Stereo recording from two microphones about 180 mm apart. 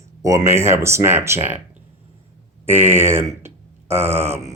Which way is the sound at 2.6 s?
10° right (ahead or behind).